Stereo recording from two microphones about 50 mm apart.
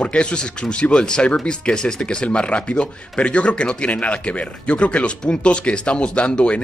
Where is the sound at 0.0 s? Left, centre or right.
Left.